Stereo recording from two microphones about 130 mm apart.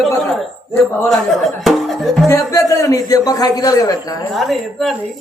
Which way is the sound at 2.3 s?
25° left (ahead or behind).